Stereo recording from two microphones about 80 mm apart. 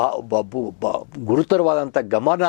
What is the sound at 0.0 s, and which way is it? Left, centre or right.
Speech, centre.